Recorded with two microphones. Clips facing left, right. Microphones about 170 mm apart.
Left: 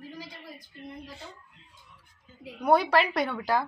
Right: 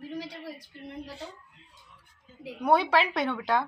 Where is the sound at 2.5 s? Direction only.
Centre (ahead or behind).